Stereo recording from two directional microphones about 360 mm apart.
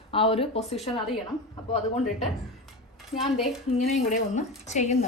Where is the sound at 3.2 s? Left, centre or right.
Centre.